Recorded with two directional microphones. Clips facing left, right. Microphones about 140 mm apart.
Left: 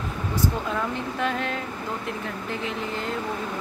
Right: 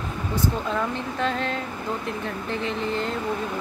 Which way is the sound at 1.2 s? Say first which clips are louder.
Right 1 dB; 5° left (ahead or behind).